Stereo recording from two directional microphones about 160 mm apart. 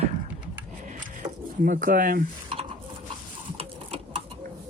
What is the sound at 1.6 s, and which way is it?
Speech, 55° right (ahead or behind).